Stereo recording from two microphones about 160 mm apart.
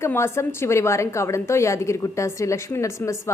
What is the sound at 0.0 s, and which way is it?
A woman's voice, 15° left (ahead or behind).